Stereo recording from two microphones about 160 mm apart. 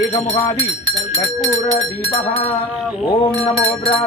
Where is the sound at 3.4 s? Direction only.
40° left (ahead or behind).